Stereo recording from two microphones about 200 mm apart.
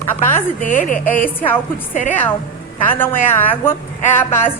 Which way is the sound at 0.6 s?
40° left (ahead or behind).